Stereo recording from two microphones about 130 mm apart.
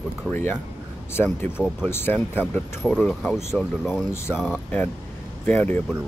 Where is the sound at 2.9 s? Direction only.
Centre (ahead or behind).